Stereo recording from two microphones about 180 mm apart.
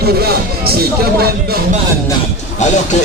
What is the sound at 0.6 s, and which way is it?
Speech, 60° right (ahead or behind).